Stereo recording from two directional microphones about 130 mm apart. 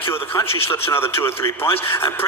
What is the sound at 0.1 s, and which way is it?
A man's voice, 20° left (ahead or behind).